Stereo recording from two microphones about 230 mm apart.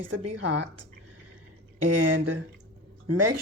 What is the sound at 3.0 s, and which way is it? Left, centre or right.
Speech, right.